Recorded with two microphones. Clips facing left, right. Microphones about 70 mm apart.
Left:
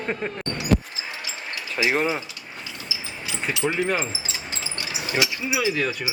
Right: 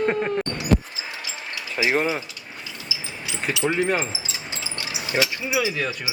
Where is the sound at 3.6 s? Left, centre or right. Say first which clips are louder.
Right 2 dB; centre.